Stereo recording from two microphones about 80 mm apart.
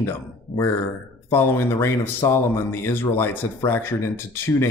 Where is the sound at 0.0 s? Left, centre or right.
Left.